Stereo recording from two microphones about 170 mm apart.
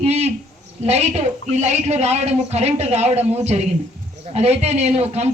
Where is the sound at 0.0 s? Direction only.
40° right (ahead or behind).